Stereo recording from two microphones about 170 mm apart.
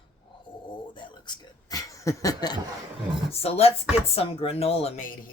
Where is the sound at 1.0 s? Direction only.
25° left (ahead or behind).